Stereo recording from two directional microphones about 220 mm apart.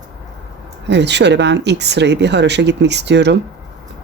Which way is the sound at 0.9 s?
50° right (ahead or behind).